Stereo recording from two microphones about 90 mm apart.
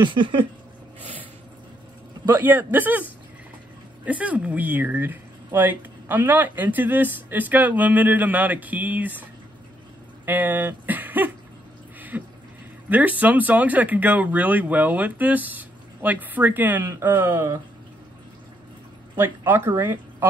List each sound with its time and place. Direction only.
0.0 s a sound: 65° right (ahead or behind)
2.3 s speech: 20° right (ahead or behind)
10.2 s speech: 20° right (ahead or behind)
12.1 s a sound: 20° right (ahead or behind)
12.9 s speech: 20° right (ahead or behind); by 17.6 s 35° right (ahead or behind)
19.1 s speech: 25° right (ahead or behind)